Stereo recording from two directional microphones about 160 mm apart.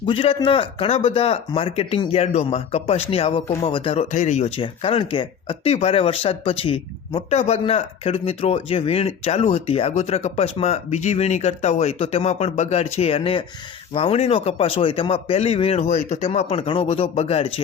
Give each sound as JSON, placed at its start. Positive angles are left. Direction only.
{"t": 0.0, "sound": "speech", "side_deg": 35}
{"t": 4.1, "sound": "speech", "side_deg": 45}